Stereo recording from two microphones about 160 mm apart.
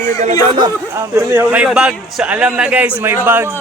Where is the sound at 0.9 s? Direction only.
15° right (ahead or behind).